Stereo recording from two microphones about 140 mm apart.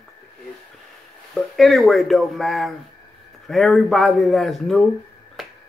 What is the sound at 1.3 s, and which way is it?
Speech, centre (ahead or behind).